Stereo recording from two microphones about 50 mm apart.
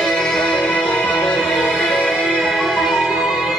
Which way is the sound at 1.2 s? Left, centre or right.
Centre.